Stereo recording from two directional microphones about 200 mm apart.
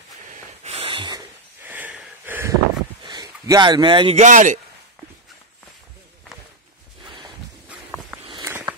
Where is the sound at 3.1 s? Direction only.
20° right (ahead or behind).